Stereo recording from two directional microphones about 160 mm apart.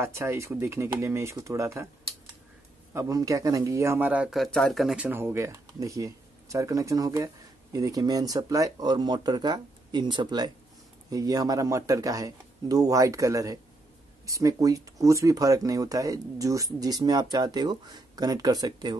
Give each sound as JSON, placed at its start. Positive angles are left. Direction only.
{"t": 0.0, "sound": "speech", "side_deg": -15}
{"t": 2.9, "sound": "speech", "side_deg": -20}